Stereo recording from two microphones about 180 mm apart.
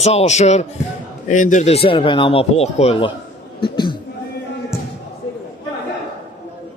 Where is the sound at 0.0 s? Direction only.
35° left (ahead or behind).